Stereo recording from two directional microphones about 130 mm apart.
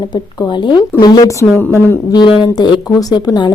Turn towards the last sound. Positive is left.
turn(degrees=35)  # may be behind; listen again after turning